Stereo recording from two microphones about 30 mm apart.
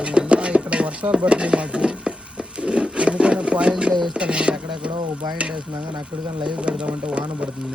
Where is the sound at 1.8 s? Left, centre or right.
Right.